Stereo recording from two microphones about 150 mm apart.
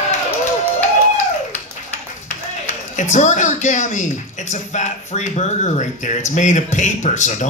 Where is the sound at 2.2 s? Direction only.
55° left (ahead or behind).